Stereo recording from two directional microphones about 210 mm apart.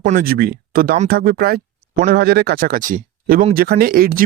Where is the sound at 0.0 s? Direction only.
35° right (ahead or behind).